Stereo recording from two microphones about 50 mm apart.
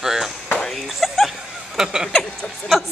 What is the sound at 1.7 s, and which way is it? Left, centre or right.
Speech, centre.